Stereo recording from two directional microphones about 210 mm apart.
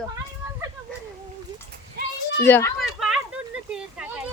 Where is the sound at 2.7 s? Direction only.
Centre (ahead or behind).